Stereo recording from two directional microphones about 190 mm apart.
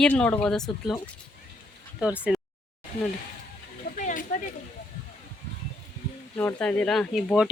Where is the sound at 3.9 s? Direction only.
45° left (ahead or behind).